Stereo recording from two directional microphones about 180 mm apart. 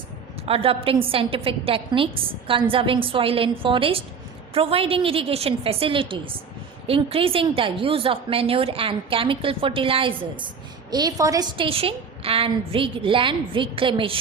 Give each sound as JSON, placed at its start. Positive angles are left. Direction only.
{"t": 0.4, "sound": "a woman's voice", "side_deg": -30}